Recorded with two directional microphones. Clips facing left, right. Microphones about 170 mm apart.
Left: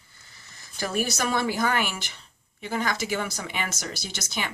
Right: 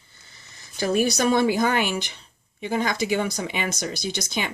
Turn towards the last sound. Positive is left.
turn(degrees=-15)  # may be behind; listen again after turning